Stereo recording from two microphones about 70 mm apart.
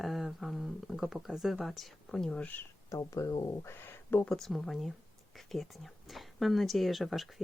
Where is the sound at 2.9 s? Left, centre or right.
Left.